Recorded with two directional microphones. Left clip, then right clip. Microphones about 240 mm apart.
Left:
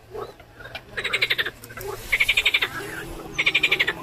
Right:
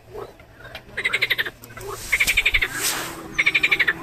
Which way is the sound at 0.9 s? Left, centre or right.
Centre.